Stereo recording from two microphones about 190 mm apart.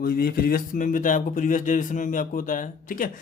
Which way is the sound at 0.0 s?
50° left (ahead or behind).